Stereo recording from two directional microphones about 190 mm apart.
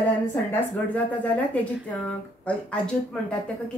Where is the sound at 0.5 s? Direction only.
10° left (ahead or behind).